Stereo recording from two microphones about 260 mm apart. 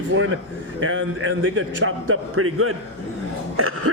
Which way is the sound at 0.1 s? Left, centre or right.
Right.